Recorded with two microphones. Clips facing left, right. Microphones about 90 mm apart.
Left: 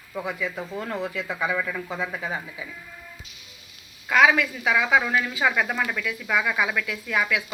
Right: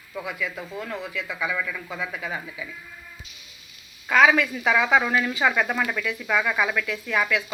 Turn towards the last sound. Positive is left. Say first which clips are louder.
# right 1 dB
turn(degrees=5)  # may be behind; listen again after turning